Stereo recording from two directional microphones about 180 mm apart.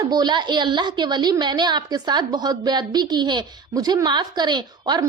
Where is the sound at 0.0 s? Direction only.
25° right (ahead or behind).